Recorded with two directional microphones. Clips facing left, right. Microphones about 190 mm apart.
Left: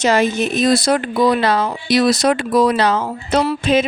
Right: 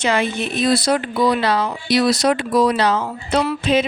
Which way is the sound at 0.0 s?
40° left (ahead or behind).